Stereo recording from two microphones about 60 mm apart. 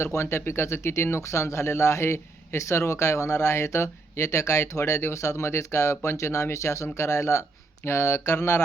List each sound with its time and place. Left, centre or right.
0.0 s speech: left
7.9 s mantra: left